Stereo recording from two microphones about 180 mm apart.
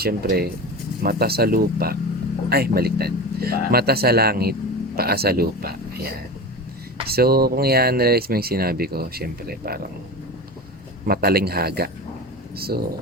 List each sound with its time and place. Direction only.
0.0 s speech: 55° right (ahead or behind)
11.0 s speech: 60° right (ahead or behind)